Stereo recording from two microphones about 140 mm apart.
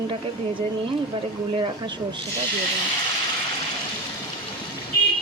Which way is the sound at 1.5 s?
40° right (ahead or behind).